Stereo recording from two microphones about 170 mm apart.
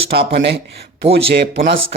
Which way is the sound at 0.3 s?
90° right.